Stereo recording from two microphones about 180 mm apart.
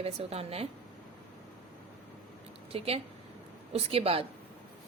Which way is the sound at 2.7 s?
35° right (ahead or behind).